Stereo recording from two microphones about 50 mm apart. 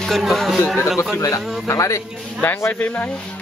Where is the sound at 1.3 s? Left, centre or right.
Left.